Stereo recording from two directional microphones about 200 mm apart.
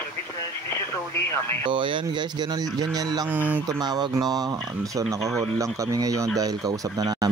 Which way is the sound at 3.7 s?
20° right (ahead or behind).